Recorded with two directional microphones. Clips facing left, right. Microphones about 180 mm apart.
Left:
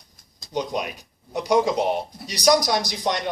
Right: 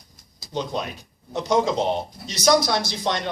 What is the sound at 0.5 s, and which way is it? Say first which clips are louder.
A man's voice: left 1 dB; 15° left (ahead or behind).